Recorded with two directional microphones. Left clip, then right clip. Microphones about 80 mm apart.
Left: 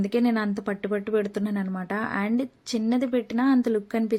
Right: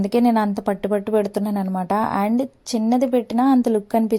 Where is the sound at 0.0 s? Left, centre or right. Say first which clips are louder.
Right 7 dB; right.